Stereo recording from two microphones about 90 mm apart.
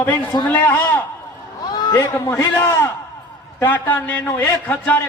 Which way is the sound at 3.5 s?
25° left (ahead or behind).